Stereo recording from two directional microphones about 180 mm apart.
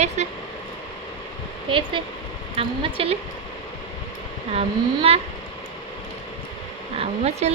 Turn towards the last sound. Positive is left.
turn(degrees=-35)  # may be behind; listen again after turning